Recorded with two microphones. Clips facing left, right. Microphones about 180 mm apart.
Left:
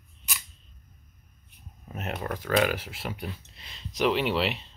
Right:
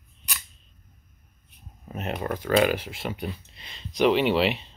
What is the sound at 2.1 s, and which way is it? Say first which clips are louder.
Speech: right 3 dB; 5° right (ahead or behind).